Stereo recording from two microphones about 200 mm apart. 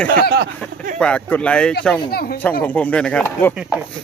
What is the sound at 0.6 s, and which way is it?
Speech, 5° left (ahead or behind).